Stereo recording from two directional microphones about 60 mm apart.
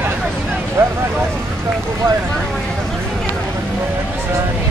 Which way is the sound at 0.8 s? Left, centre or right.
Right.